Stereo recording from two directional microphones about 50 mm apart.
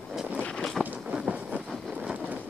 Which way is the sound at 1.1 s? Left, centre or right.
Right.